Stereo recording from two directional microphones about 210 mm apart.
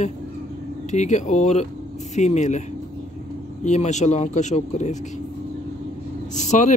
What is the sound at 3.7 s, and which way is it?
Speech, 35° left (ahead or behind).